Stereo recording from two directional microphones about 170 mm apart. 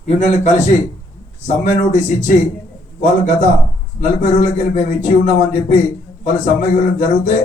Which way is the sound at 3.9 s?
45° left (ahead or behind).